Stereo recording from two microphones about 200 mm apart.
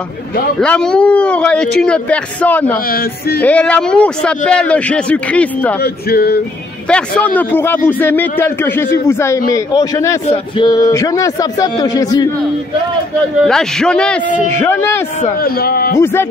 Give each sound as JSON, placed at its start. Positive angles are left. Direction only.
{"t": 0.6, "sound": "a man's voice", "side_deg": 5}
{"t": 2.9, "sound": "speech", "side_deg": 50}
{"t": 3.4, "sound": "a man's voice", "side_deg": 5}
{"t": 6.0, "sound": "speech", "side_deg": 50}
{"t": 6.9, "sound": "a man's voice", "side_deg": 5}
{"t": 13.5, "sound": "a man's voice", "side_deg": 5}
{"t": 15.4, "sound": "speech", "side_deg": 50}
{"t": 15.9, "sound": "a man's voice", "side_deg": 10}